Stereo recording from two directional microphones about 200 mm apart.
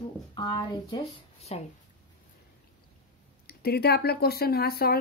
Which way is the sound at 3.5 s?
50° left (ahead or behind).